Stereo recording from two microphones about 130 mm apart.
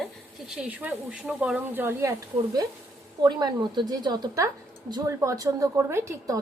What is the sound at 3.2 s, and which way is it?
A woman's voice, 30° right (ahead or behind).